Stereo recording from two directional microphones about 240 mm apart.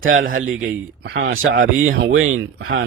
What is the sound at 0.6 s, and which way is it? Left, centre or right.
Speech, right.